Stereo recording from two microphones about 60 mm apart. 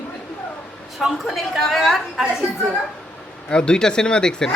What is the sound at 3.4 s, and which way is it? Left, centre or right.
Speech, centre.